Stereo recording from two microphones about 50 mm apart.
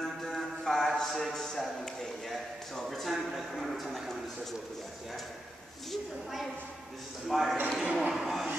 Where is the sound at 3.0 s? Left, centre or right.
Centre.